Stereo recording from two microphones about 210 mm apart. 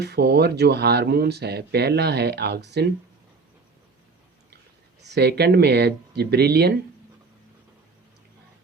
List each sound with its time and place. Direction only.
0.0 s speech: 50° right (ahead or behind)
5.0 s speech: 50° right (ahead or behind)